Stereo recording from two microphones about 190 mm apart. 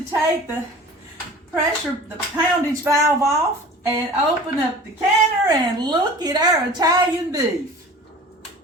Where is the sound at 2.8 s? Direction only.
15° right (ahead or behind).